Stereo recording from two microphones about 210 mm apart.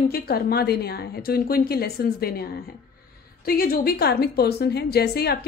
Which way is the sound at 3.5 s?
45° left (ahead or behind).